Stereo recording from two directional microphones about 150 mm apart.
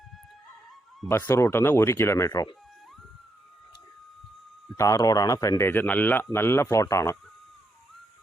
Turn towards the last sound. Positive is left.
turn(degrees=20)  # may be behind; listen again after turning